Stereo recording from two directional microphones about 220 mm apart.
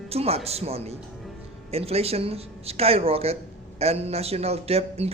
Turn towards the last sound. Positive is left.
turn(degrees=-25)  # may be behind; listen again after turning